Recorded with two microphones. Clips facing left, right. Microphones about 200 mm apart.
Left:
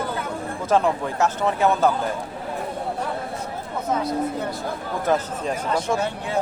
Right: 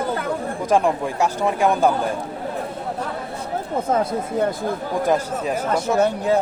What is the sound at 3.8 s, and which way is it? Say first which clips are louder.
Speech: right 2 dB; 50° right (ahead or behind).